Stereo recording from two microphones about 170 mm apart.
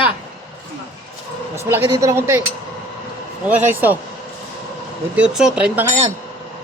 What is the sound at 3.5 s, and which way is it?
Speech, 10° right (ahead or behind).